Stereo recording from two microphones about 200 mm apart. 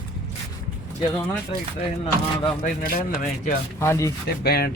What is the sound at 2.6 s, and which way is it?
Speech, 45° left (ahead or behind).